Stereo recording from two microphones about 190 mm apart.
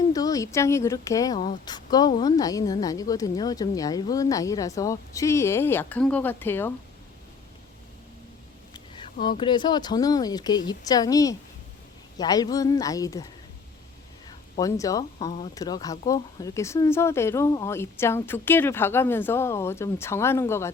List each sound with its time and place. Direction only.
0.0 s a woman's voice: 20° left (ahead or behind)
9.4 s speech: 25° left (ahead or behind)
14.3 s a woman's voice: 20° left (ahead or behind)